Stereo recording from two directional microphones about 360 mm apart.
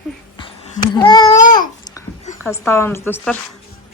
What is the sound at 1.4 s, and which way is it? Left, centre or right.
Babbling, left.